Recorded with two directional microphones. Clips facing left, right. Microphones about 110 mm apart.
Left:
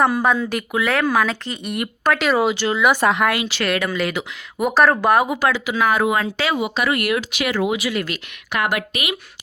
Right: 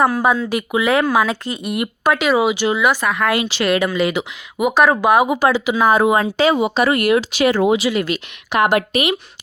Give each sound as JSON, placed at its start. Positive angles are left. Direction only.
{"t": 0.0, "sound": "speech", "side_deg": -5}
{"t": 2.9, "sound": "speech", "side_deg": 20}
{"t": 3.3, "sound": "speech", "side_deg": -20}
{"t": 4.6, "sound": "speech", "side_deg": -5}
{"t": 5.3, "sound": "speech", "side_deg": -20}